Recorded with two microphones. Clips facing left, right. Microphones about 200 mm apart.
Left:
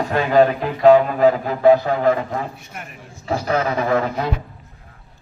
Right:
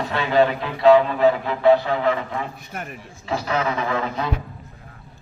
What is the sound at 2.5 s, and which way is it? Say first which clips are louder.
Speech: right 3 dB; 45° right (ahead or behind).